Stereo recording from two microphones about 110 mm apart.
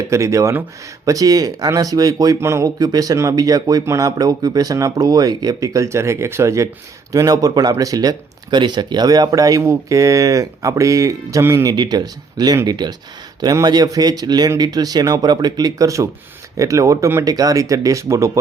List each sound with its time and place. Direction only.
0.0 s speech: 25° right (ahead or behind)
11.7 s speech: 40° right (ahead or behind)